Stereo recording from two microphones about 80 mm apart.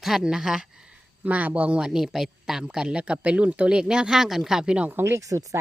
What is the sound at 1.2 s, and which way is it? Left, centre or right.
Speech, centre.